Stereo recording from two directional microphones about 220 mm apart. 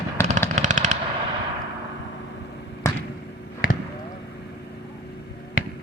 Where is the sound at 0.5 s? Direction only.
35° right (ahead or behind).